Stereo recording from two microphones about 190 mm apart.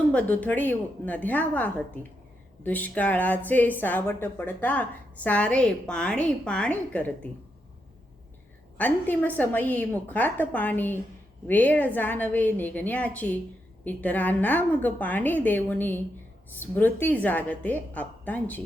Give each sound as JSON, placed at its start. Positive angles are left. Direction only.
{"t": 0.1, "sound": "a woman's voice", "side_deg": 10}
{"t": 8.8, "sound": "a woman's voice", "side_deg": 10}